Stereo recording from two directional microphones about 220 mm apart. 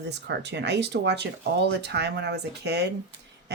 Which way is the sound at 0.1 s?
50° right (ahead or behind).